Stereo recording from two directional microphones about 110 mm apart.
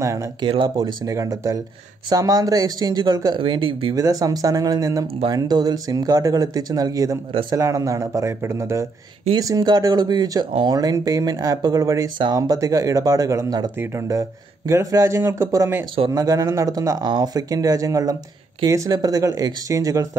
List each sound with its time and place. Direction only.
0.4 s speech: 50° right (ahead or behind)
0.7 s speech: 35° right (ahead or behind)
3.3 s speech: 50° right (ahead or behind)
3.9 s speech: 35° right (ahead or behind)